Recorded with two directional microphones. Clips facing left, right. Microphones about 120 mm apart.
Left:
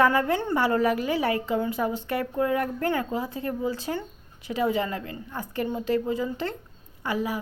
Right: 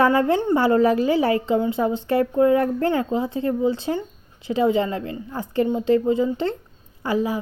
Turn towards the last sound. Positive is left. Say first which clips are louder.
# right 6 dB
turn(degrees=-30)  # may be behind; listen again after turning